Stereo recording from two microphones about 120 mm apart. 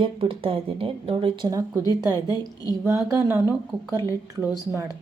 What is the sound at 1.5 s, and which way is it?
Speech, 25° right (ahead or behind).